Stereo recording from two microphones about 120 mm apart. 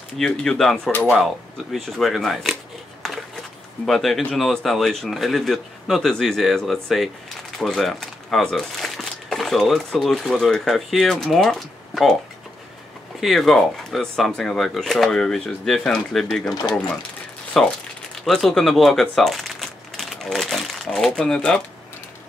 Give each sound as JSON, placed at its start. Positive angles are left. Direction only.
{"t": 0.2, "sound": "speech", "side_deg": 5}
{"t": 3.0, "sound": "a sound", "side_deg": 0}
{"t": 3.8, "sound": "speech", "side_deg": 0}
{"t": 13.2, "sound": "speech", "side_deg": 0}